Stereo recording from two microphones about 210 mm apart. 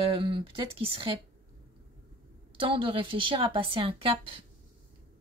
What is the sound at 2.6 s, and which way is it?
Speech, 25° right (ahead or behind).